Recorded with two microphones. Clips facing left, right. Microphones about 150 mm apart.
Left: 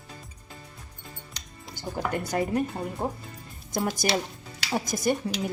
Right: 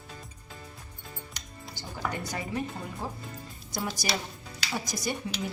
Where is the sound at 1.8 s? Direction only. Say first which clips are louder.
Left 5 dB; 50° left (ahead or behind).